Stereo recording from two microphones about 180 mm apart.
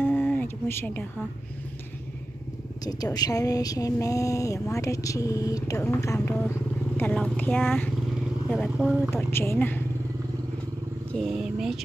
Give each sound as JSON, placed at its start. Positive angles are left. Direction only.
{"t": 0.0, "sound": "a sound", "side_deg": 10}
{"t": 2.8, "sound": "speech", "side_deg": 20}
{"t": 8.5, "sound": "speech", "side_deg": -5}
{"t": 9.3, "sound": "speech", "side_deg": 15}
{"t": 11.1, "sound": "speech", "side_deg": 0}